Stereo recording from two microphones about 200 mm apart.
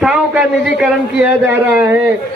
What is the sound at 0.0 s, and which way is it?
A man's voice, centre (ahead or behind).